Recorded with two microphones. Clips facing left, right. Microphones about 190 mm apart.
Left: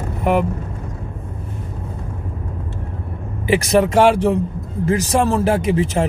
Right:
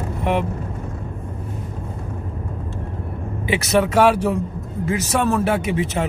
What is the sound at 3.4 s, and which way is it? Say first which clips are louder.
Speech: left 4 dB; 35° left (ahead or behind).